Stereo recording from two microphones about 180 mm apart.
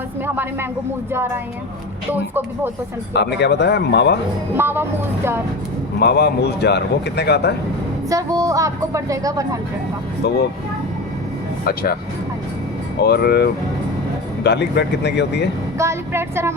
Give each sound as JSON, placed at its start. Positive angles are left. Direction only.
{"t": 1.1, "sound": "speech", "side_deg": -15}
{"t": 3.1, "sound": "speech", "side_deg": 70}
{"t": 4.5, "sound": "speech", "side_deg": -10}
{"t": 6.0, "sound": "speech", "side_deg": 65}
{"t": 8.1, "sound": "a woman's voice", "side_deg": -20}
{"t": 10.2, "sound": "speech", "side_deg": 70}
{"t": 11.6, "sound": "speech", "side_deg": 55}
{"t": 13.0, "sound": "speech", "side_deg": 65}
{"t": 15.8, "sound": "vehicle", "side_deg": -15}